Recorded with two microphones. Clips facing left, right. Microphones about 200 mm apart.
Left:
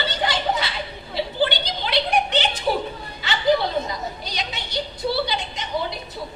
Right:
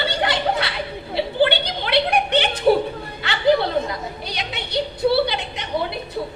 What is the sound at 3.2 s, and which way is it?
Chatter, 60° right (ahead or behind).